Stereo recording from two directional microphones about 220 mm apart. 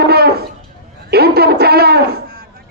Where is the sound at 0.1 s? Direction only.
45° right (ahead or behind).